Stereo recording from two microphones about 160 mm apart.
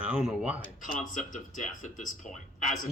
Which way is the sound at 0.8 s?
55° left (ahead or behind).